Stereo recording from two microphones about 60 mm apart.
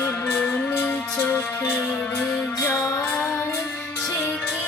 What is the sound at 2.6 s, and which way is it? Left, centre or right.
Music, left.